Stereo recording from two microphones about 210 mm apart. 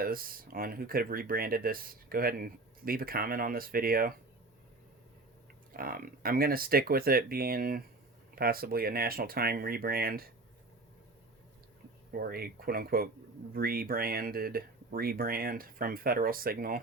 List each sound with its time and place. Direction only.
0.0 s speech: 45° right (ahead or behind)
5.7 s speech: 45° right (ahead or behind)
12.1 s speech: 45° right (ahead or behind)